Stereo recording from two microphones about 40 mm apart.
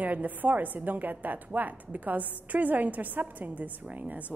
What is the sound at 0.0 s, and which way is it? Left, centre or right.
A woman's voice, right.